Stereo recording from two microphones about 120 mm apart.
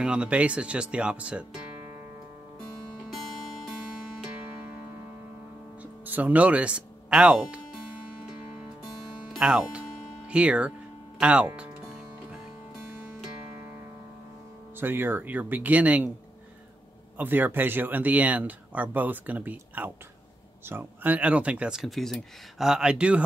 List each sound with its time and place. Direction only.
0.0 s speech: 10° right (ahead or behind)
5.8 s speech: 15° right (ahead or behind)
9.4 s music: 5° right (ahead or behind)
11.1 s speech: 10° right (ahead or behind)
14.8 s speech: 15° right (ahead or behind)
17.2 s speech: 15° right (ahead or behind)